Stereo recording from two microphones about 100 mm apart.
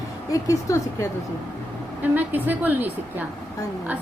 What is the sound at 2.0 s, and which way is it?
Speech, 20° right (ahead or behind).